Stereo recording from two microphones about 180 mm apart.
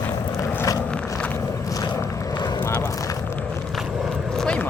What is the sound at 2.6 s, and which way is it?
Vehicle, 15° left (ahead or behind).